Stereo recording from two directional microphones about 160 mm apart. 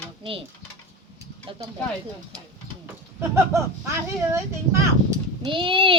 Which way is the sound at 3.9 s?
15° right (ahead or behind).